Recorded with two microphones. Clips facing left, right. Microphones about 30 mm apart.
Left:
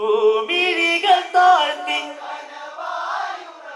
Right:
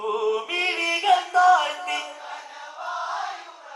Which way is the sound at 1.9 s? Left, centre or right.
Left.